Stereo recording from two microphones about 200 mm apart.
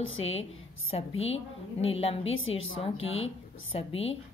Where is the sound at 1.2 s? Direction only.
30° left (ahead or behind).